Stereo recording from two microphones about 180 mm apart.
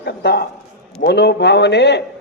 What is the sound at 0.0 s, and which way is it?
A man's voice, 65° left (ahead or behind).